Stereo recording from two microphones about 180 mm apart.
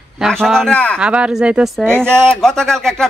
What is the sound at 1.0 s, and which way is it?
Speech, 5° right (ahead or behind).